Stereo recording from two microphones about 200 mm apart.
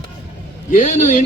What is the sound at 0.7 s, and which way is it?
Speech, 45° left (ahead or behind).